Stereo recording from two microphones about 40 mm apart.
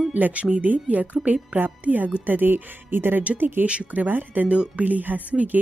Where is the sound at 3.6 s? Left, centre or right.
Right.